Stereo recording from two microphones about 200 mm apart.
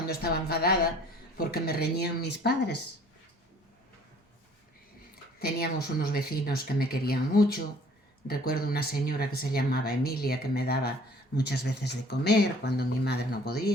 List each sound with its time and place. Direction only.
0.1 s speech: 50° left (ahead or behind)
5.4 s speech: 50° left (ahead or behind)